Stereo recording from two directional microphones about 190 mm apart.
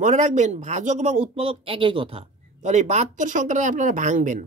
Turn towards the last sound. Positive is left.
turn(degrees=-45)  # may be behind; listen again after turning